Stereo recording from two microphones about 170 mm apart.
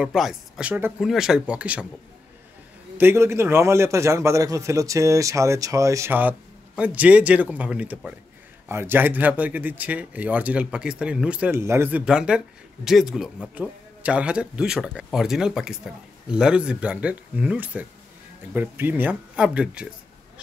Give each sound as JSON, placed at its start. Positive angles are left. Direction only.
{"t": 0.0, "sound": "speech", "side_deg": -5}
{"t": 3.0, "sound": "speech", "side_deg": -15}